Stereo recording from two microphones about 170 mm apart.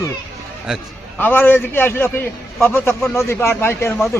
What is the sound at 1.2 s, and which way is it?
A man's voice, 10° left (ahead or behind).